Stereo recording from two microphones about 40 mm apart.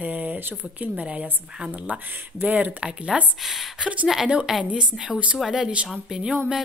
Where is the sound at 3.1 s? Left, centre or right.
Centre.